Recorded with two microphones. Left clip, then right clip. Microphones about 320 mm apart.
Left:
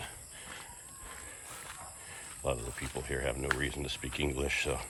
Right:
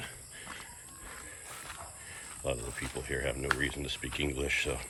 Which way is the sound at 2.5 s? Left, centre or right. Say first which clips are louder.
Even; centre.